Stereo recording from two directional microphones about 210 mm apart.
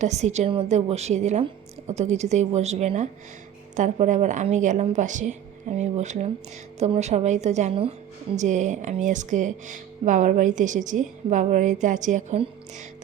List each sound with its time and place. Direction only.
0.0 s speech: 35° right (ahead or behind)